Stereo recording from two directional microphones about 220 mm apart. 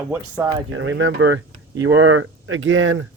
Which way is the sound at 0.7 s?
60° right (ahead or behind).